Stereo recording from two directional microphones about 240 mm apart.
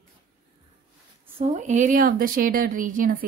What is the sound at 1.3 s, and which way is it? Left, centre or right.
A woman's voice, right.